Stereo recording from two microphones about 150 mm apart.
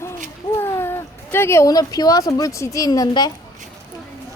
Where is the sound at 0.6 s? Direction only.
15° left (ahead or behind).